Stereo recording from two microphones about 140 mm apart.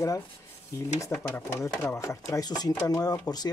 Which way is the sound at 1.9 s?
20° left (ahead or behind).